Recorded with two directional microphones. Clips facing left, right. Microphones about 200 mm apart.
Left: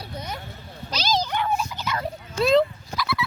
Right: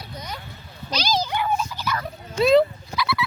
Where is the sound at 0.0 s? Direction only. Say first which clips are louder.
Left 2 dB; 30° left (ahead or behind).